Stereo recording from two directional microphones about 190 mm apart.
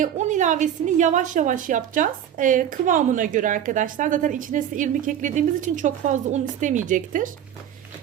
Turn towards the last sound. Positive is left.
turn(degrees=-45)  # may be behind; listen again after turning